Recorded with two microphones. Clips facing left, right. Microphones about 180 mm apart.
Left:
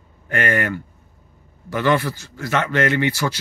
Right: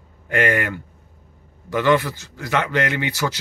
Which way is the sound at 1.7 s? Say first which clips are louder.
Right 1 dB; 15° right (ahead or behind).